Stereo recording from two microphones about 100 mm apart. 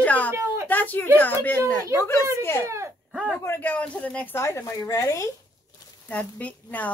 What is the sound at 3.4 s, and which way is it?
Speech, 25° left (ahead or behind).